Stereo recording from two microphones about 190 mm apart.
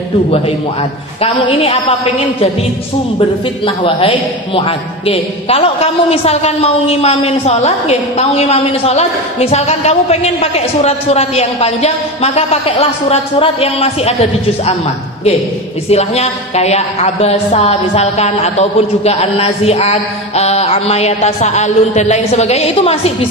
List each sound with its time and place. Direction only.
1.2 s a woman's voice: 30° left (ahead or behind)
3.6 s a woman's voice: 30° left (ahead or behind)
15.9 s a woman's voice: 35° left (ahead or behind)